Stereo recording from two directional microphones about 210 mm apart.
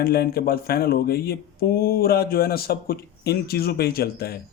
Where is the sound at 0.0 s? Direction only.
45° left (ahead or behind).